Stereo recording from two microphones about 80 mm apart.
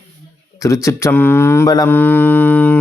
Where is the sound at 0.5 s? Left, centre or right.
Left.